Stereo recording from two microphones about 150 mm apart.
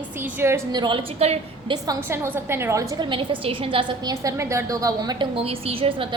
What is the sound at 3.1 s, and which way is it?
A woman's voice, 35° right (ahead or behind).